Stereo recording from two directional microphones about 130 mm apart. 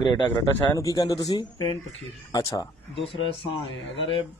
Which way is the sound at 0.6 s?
25° left (ahead or behind).